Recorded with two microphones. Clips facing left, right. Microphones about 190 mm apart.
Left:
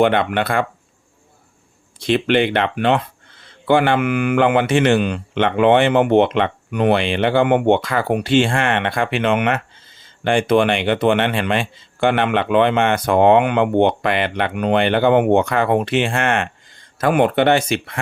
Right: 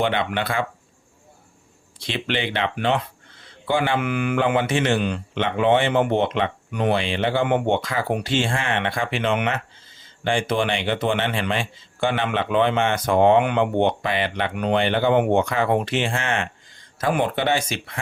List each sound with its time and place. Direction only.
0.0 s speech: 55° left (ahead or behind)
2.0 s speech: 50° left (ahead or behind)